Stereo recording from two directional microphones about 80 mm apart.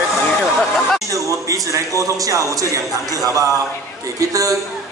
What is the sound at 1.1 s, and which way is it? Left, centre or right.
A man's voice, right.